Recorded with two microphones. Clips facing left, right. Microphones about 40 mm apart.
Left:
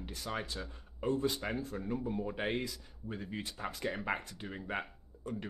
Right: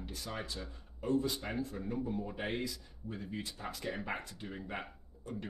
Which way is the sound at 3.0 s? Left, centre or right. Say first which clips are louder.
Left 1 dB; left.